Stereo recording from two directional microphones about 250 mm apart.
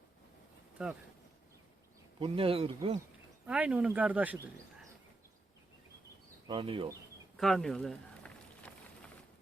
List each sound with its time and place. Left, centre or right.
2.1 s speech: right
3.4 s speech: centre
6.5 s speech: right
7.3 s a sound: centre